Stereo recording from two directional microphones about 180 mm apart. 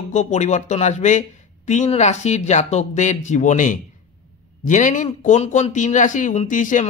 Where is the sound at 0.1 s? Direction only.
40° left (ahead or behind).